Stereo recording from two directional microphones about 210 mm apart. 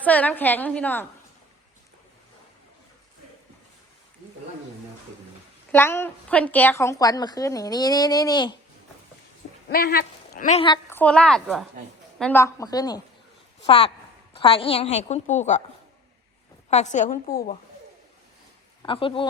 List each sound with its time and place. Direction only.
0.0 s a woman's voice: 5° left (ahead or behind)
5.7 s a woman's voice: 10° left (ahead or behind)
9.6 s speech: 45° left (ahead or behind)
10.8 s a woman's voice: 10° left (ahead or behind); by 15.6 s 35° left (ahead or behind)
16.6 s a woman's voice: 35° left (ahead or behind)
18.8 s speech: 25° left (ahead or behind)